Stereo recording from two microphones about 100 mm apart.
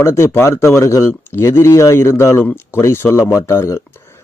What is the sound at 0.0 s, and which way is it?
Speech, 25° left (ahead or behind).